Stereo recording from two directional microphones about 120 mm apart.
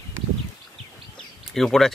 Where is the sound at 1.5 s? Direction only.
Centre (ahead or behind).